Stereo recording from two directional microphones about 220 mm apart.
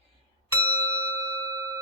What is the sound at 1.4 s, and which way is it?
Bell, 15° right (ahead or behind).